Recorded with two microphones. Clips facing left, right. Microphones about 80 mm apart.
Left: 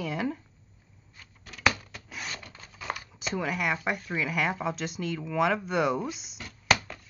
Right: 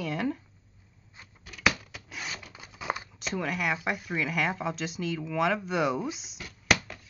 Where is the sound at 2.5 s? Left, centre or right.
Centre.